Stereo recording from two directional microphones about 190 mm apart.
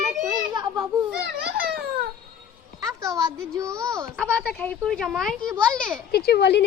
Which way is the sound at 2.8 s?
20° right (ahead or behind).